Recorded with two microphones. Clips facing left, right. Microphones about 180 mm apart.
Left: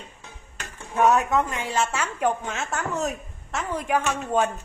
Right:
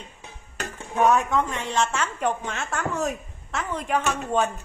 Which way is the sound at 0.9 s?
Centre (ahead or behind).